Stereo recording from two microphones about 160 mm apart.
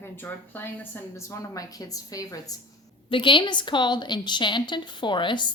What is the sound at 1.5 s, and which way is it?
A woman's voice, 20° left (ahead or behind).